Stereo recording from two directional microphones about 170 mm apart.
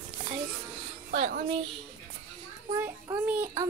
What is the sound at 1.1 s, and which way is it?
Speech, 55° right (ahead or behind).